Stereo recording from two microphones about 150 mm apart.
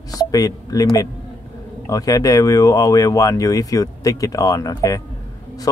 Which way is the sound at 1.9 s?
25° left (ahead or behind).